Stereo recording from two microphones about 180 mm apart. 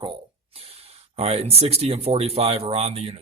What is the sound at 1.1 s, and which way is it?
Speech, 35° right (ahead or behind).